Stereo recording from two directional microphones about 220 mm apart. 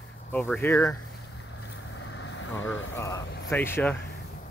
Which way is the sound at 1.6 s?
60° left (ahead or behind).